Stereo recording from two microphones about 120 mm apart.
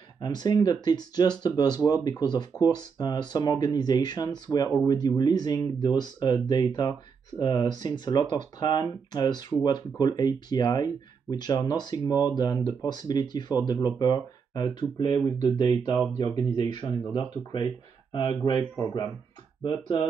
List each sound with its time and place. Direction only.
0.2 s speech: 35° left (ahead or behind)
19.6 s speech: 40° left (ahead or behind)